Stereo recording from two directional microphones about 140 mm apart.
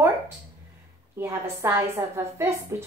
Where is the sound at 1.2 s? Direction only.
15° right (ahead or behind).